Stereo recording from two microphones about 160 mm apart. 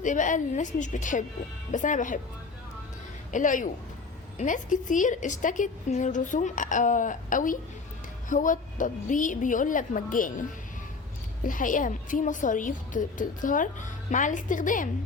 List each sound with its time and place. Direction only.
0.0 s a woman's voice: 50° left (ahead or behind)
3.3 s a woman's voice: 55° left (ahead or behind)
11.4 s a woman's voice: 55° left (ahead or behind)